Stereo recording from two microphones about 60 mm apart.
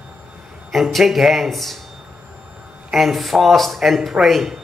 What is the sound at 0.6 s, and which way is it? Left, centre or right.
A man's voice, centre.